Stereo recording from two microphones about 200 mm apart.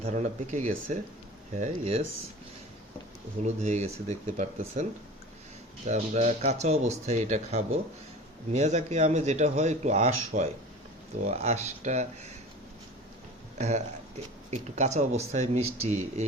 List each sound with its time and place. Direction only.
0.0 s speech: 35° right (ahead or behind)
3.4 s speech: 35° right (ahead or behind)
13.6 s speech: 35° right (ahead or behind)